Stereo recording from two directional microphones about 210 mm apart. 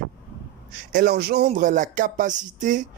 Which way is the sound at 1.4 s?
35° right (ahead or behind).